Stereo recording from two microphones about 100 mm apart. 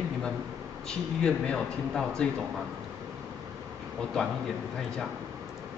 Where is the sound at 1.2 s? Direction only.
5° left (ahead or behind).